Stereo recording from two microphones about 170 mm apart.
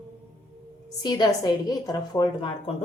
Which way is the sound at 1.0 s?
25° left (ahead or behind).